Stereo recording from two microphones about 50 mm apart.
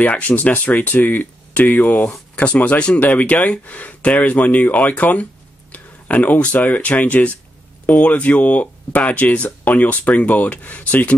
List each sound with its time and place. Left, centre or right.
0.0 s speech: left